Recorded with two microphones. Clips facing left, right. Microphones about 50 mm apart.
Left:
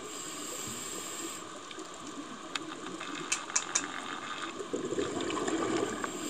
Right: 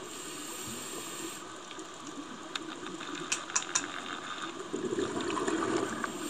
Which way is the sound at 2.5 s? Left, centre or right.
Left.